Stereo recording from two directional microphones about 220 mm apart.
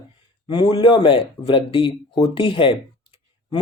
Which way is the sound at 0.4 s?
20° left (ahead or behind).